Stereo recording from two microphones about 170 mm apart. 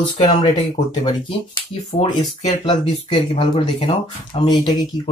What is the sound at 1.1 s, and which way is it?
Speech, 30° left (ahead or behind).